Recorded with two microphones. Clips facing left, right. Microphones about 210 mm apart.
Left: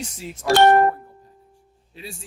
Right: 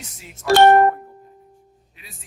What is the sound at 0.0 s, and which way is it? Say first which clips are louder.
Speech: left 9 dB; 30° left (ahead or behind).